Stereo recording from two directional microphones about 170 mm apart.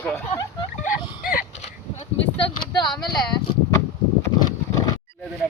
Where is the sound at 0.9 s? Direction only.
55° left (ahead or behind).